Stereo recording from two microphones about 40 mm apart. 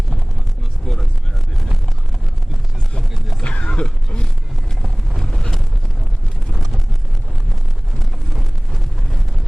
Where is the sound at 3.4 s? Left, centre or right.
Left.